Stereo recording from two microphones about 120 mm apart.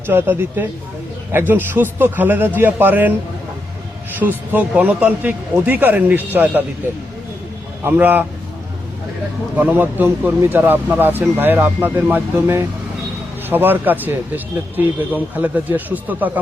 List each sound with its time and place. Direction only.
0.1 s speech: 15° right (ahead or behind)
4.2 s speech: 15° right (ahead or behind)
7.9 s speech: 15° right (ahead or behind)
9.6 s speech: 15° right (ahead or behind)